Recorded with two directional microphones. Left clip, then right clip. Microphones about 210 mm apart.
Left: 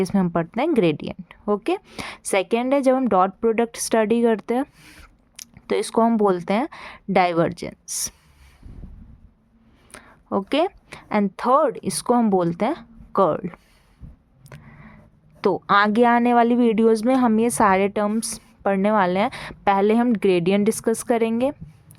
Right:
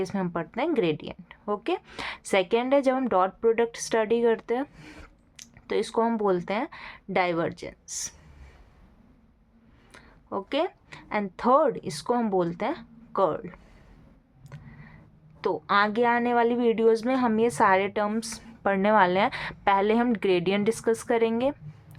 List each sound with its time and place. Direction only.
0.0 s a woman's voice: 35° left (ahead or behind)
9.9 s a woman's voice: 40° left (ahead or behind)
14.5 s a sound: 35° left (ahead or behind)
15.4 s a woman's voice: 40° left (ahead or behind)